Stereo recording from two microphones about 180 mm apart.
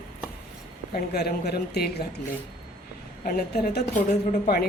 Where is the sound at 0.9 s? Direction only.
60° left (ahead or behind).